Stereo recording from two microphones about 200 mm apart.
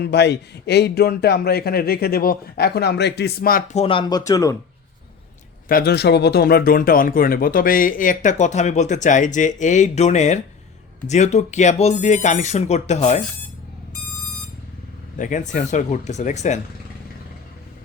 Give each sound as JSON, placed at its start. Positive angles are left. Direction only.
{"t": 0.0, "sound": "speech", "side_deg": 60}
{"t": 3.8, "sound": "speech", "side_deg": 25}
{"t": 5.6, "sound": "speech", "side_deg": 50}
{"t": 15.2, "sound": "speech", "side_deg": 40}